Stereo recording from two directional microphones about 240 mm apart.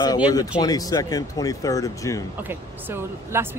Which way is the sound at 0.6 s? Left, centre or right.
Centre.